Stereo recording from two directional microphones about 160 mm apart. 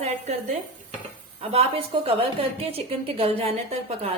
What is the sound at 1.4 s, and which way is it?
A woman's voice, 35° right (ahead or behind).